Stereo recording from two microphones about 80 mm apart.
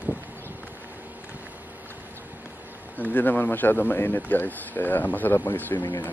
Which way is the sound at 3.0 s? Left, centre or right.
Left.